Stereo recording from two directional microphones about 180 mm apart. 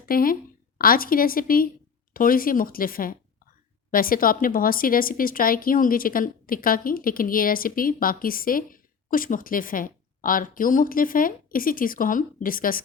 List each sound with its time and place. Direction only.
0.0 s a woman's voice: 55° left (ahead or behind)